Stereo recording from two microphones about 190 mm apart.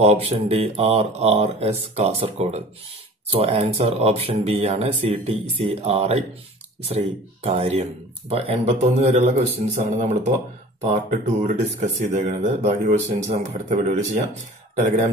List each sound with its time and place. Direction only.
0.0 s speech: 35° right (ahead or behind)
7.4 s speech: 35° right (ahead or behind)